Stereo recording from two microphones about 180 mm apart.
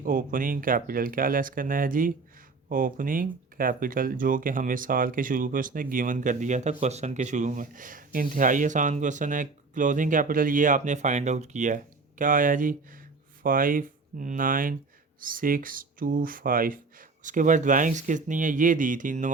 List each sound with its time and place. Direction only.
0.0 s speech: 50° right (ahead or behind)